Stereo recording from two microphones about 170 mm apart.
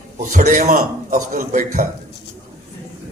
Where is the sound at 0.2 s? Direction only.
45° right (ahead or behind).